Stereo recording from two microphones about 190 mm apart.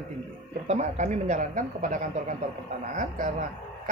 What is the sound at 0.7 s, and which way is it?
Speech, 35° right (ahead or behind).